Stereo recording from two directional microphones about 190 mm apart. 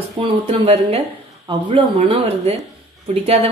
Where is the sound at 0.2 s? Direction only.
30° right (ahead or behind).